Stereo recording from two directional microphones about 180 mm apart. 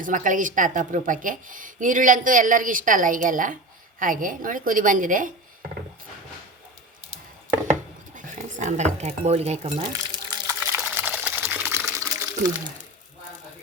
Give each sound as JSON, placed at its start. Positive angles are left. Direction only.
{"t": 0.0, "sound": "a woman's voice", "side_deg": -45}
{"t": 7.7, "sound": "dishes", "side_deg": -45}